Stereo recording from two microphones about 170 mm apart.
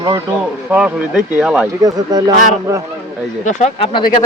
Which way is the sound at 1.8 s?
20° right (ahead or behind).